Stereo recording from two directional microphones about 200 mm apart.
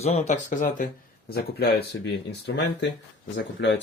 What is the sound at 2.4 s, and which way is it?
Speech, 65° left (ahead or behind).